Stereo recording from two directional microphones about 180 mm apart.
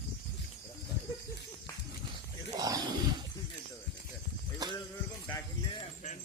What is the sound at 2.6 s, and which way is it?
Wild animals, 20° right (ahead or behind).